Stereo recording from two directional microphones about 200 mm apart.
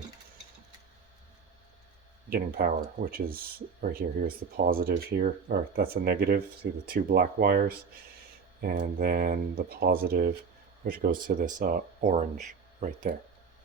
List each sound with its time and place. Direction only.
2.3 s speech: 45° right (ahead or behind)
9.0 s speech: 50° right (ahead or behind)